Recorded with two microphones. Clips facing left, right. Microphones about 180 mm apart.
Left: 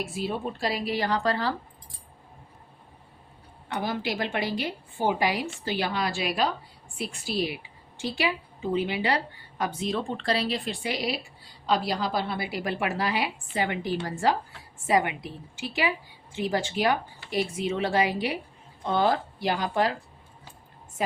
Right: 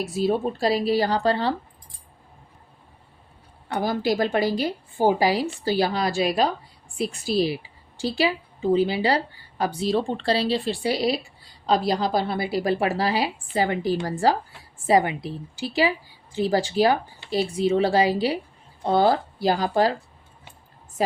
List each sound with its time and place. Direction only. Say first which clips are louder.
0.0 s a woman's voice: right 7 dB; 40° right (ahead or behind)
3.7 s a woman's voice: right 6 dB; 40° right (ahead or behind)